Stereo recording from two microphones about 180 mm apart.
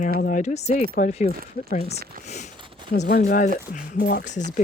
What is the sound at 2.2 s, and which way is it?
Speech, 40° left (ahead or behind).